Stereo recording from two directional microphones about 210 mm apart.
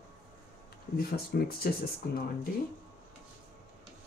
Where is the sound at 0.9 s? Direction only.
45° left (ahead or behind).